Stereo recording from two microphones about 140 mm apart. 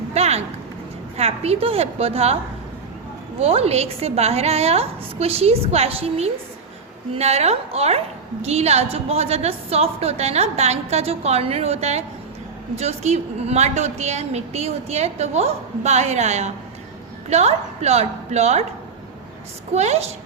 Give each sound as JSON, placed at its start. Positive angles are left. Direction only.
{"t": 0.1, "sound": "a sound", "side_deg": -50}
{"t": 1.1, "sound": "a woman's voice", "side_deg": -50}
{"t": 3.4, "sound": "a woman's voice", "side_deg": -45}
{"t": 19.7, "sound": "a woman's voice", "side_deg": -50}